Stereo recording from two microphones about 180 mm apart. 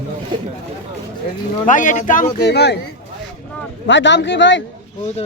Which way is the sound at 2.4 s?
70° left (ahead or behind).